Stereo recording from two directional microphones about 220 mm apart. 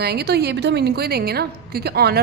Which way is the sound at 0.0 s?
45° right (ahead or behind).